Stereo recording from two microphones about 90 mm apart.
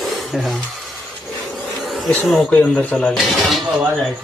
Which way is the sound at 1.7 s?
Centre (ahead or behind).